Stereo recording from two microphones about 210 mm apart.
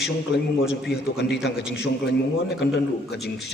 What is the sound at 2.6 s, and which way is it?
Speech, 55° left (ahead or behind).